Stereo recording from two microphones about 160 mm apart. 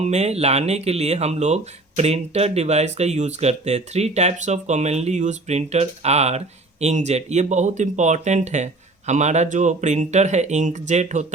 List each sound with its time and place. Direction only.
0.0 s speech: 45° right (ahead or behind)